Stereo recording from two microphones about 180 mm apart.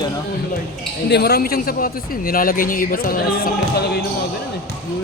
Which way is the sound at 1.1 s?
65° left (ahead or behind).